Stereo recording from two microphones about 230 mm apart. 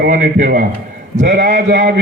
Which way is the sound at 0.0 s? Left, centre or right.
Right.